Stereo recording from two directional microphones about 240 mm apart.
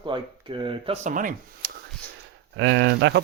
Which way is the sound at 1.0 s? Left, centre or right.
Right.